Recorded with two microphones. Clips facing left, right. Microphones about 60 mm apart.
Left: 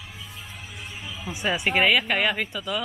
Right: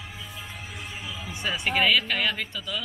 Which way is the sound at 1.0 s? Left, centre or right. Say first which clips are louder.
Left 1 dB; centre.